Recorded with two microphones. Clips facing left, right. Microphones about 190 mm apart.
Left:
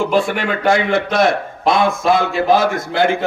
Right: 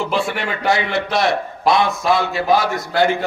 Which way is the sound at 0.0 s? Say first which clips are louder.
Left 4 dB; 50° left (ahead or behind).